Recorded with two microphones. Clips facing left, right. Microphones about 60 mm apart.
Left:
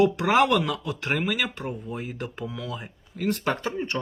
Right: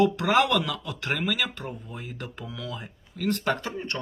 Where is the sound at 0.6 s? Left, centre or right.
Left.